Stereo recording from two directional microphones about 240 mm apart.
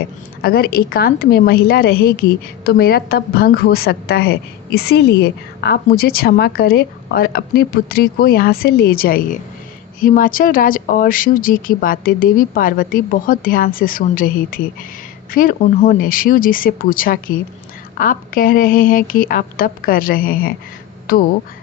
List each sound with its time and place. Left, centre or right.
0.4 s a woman's voice: left